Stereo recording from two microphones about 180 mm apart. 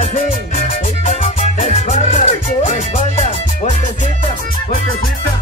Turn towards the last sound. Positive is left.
turn(degrees=40)  # may be behind; listen again after turning